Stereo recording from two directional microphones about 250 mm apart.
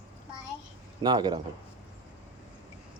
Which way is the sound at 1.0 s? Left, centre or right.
Centre.